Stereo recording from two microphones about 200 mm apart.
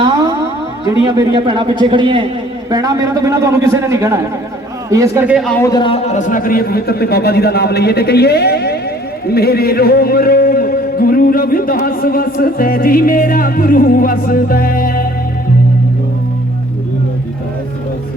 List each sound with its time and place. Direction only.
0.0 s music: 20° right (ahead or behind)
1.0 s a man's voice: 20° right (ahead or behind)
5.5 s a man's voice: 10° left (ahead or behind)
5.7 s a man's voice: 25° left (ahead or behind); by 15.0 s 45° left (ahead or behind)